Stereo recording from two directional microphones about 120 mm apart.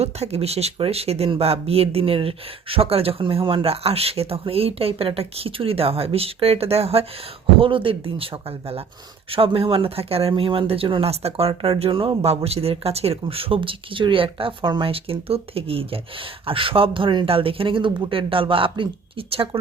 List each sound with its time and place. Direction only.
0.0 s speech: 60° right (ahead or behind)
7.6 s speech: 45° right (ahead or behind)
11.1 s speech: 60° right (ahead or behind)